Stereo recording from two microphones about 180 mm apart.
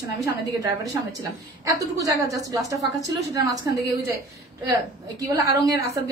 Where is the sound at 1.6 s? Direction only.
20° right (ahead or behind).